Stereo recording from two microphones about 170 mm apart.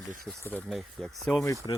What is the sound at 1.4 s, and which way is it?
Speech, 20° left (ahead or behind).